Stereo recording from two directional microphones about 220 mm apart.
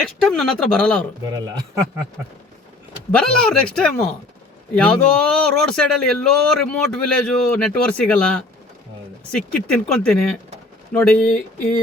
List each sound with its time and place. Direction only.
0.0 s speech: 5° left (ahead or behind)
1.3 s speech: 15° right (ahead or behind)
3.1 s speech: 5° left (ahead or behind)